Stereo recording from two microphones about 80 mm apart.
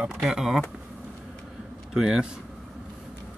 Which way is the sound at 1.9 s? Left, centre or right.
Centre.